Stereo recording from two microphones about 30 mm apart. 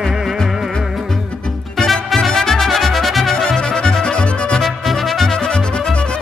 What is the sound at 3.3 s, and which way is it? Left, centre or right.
Accordion, centre.